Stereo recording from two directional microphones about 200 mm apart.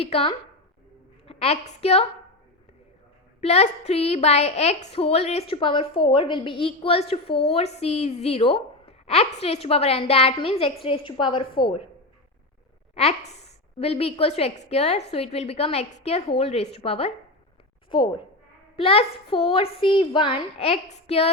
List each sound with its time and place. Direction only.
0.0 s a woman's voice: 30° left (ahead or behind)
3.4 s a woman's voice: 35° left (ahead or behind)
12.9 s a woman's voice: 30° left (ahead or behind)
18.8 s a woman's voice: 30° left (ahead or behind)